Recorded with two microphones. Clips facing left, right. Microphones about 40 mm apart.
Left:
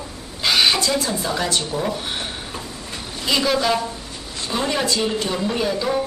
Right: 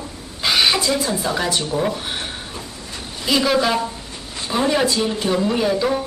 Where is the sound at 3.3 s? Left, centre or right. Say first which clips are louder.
Right 2 dB; centre.